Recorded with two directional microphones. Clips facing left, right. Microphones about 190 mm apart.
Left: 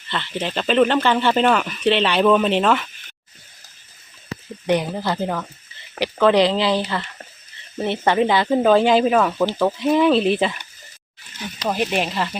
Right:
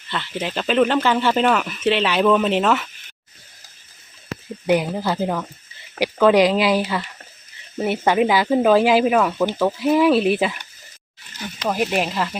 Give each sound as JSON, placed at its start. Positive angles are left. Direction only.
{"t": 0.1, "sound": "speech", "side_deg": -5}
{"t": 4.6, "sound": "speech", "side_deg": -10}
{"t": 11.8, "sound": "speech", "side_deg": -5}